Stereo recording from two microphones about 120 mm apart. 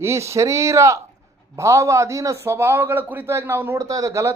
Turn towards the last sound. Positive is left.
turn(degrees=-25)  # may be behind; listen again after turning